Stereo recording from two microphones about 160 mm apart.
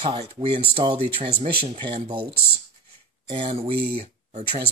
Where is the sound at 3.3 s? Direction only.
35° right (ahead or behind).